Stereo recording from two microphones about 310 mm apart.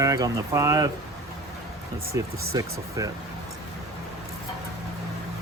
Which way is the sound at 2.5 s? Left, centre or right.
Centre.